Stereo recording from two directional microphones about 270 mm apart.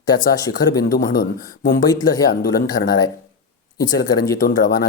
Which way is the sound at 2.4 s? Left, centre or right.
Left.